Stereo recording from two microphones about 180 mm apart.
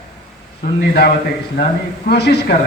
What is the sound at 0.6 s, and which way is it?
A man's voice, 60° left (ahead or behind).